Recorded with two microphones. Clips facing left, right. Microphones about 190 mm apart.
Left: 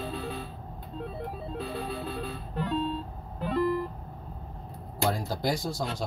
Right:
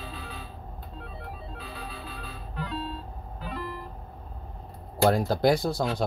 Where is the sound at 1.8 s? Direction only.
50° left (ahead or behind).